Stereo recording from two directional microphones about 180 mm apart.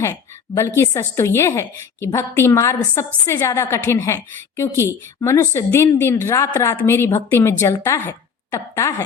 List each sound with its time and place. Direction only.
0.8 s a woman's voice: 15° left (ahead or behind)